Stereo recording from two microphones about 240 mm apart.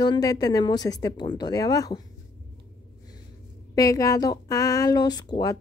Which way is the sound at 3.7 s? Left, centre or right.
Centre.